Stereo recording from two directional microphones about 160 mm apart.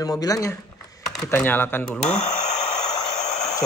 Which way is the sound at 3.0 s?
45° left (ahead or behind).